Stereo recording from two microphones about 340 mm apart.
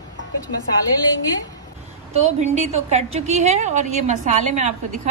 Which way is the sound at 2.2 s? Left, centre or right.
Right.